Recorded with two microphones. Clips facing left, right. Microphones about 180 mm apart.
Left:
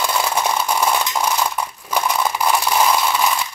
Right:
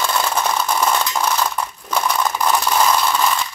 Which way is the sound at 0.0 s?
10° left (ahead or behind).